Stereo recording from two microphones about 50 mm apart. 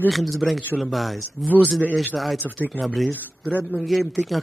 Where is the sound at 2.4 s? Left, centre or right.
Left.